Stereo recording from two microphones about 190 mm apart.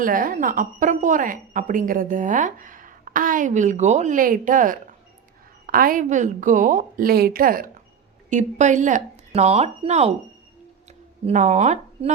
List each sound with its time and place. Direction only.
0.0 s a woman's voice: 45° right (ahead or behind)
11.3 s speech: 40° right (ahead or behind)